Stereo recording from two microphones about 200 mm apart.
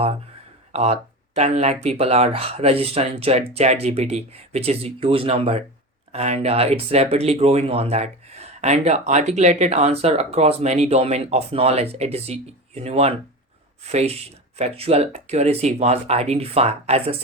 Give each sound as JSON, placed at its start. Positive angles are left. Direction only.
{"t": 0.7, "sound": "speech", "side_deg": -30}